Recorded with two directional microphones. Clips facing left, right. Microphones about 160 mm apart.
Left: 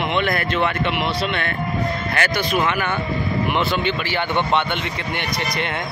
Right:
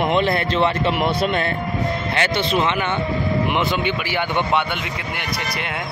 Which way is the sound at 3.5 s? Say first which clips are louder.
Even; 15° right (ahead or behind).